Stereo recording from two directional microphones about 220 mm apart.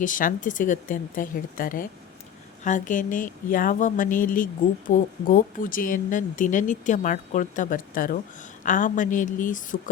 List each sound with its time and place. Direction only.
0.0 s speech: 35° left (ahead or behind)